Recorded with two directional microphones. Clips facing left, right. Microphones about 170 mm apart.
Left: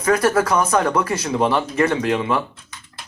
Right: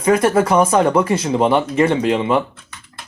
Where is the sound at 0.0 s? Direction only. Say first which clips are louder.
Right 3 dB; 25° right (ahead or behind).